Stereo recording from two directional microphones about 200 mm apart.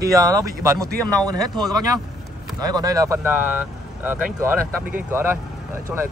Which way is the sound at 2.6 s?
20° right (ahead or behind).